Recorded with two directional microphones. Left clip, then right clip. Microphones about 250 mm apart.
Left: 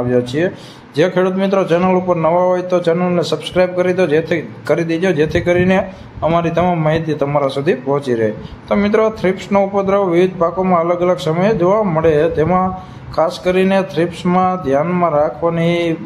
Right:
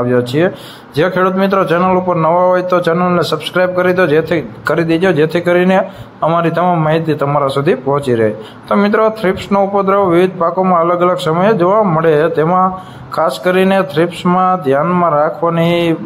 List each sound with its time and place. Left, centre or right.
0.1 s a man's voice: centre